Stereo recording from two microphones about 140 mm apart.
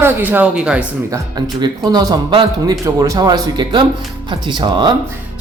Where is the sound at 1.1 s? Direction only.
30° right (ahead or behind).